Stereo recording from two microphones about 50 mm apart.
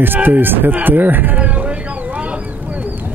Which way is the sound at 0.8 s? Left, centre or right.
Right.